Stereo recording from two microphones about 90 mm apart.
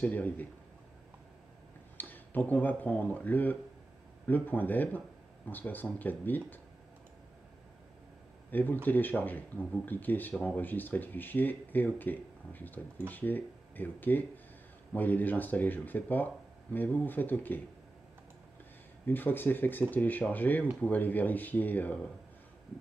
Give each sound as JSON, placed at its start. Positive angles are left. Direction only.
{"t": 0.0, "sound": "a man's voice", "side_deg": 15}
{"t": 2.0, "sound": "speech", "side_deg": 20}
{"t": 8.5, "sound": "speech", "side_deg": 20}
{"t": 19.0, "sound": "speech", "side_deg": 20}